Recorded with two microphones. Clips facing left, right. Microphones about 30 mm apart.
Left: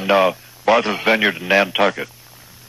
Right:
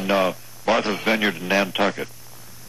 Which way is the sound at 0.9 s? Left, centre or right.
Centre.